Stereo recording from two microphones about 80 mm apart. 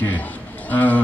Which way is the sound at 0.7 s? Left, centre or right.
Left.